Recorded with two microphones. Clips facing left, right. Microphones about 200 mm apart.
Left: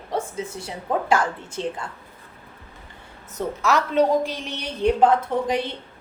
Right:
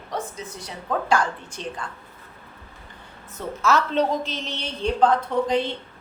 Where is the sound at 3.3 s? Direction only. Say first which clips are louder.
Even; 15° left (ahead or behind).